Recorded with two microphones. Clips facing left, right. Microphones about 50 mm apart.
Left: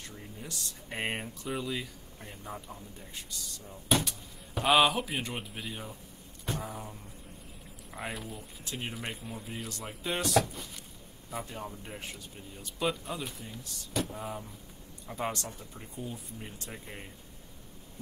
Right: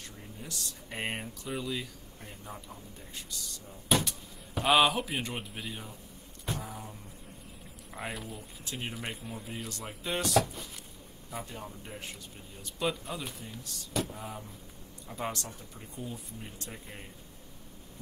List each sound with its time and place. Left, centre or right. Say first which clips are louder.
0.0 s a sound: left 1 dB; centre
1.5 s speech: left 1 dB; centre
3.9 s speech: even; centre